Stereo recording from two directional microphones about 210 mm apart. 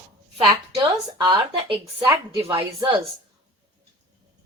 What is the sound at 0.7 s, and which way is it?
A woman's voice, 20° right (ahead or behind).